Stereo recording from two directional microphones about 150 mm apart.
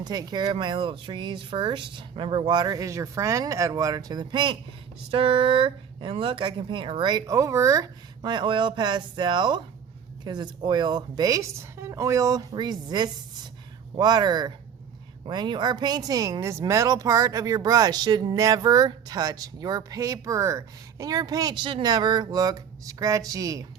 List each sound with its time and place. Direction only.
0.0 s speech: 25° right (ahead or behind)